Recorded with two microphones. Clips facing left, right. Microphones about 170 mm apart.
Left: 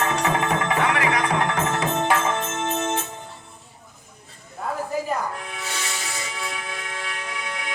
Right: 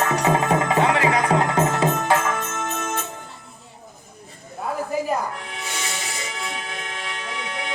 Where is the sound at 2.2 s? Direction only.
25° left (ahead or behind).